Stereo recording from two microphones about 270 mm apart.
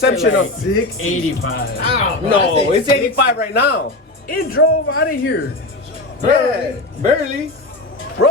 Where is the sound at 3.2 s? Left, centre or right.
Left.